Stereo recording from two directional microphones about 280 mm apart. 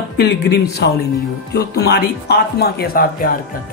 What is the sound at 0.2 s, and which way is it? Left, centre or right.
Speech, left.